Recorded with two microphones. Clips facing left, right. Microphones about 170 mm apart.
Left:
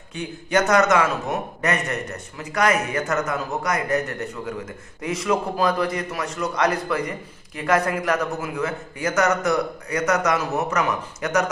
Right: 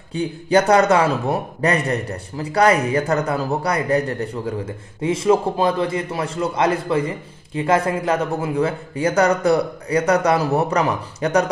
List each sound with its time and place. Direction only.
0.1 s a man's voice: 30° right (ahead or behind)